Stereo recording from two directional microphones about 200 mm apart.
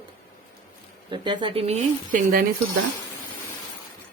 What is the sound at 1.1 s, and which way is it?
Speech, 25° right (ahead or behind).